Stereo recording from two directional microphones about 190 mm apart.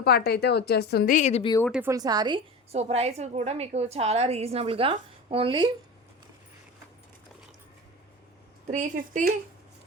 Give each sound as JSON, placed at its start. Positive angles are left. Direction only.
{"t": 0.0, "sound": "a woman's voice", "side_deg": 55}
{"t": 1.8, "sound": "a woman's voice", "side_deg": -20}
{"t": 2.7, "sound": "a woman's voice", "side_deg": -35}
{"t": 8.7, "sound": "a woman's voice", "side_deg": -40}